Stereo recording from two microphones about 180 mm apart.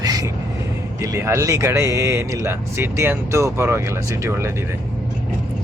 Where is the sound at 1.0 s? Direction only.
15° right (ahead or behind).